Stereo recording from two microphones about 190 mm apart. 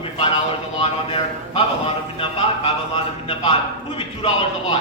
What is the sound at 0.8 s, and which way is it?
Speech, 30° left (ahead or behind).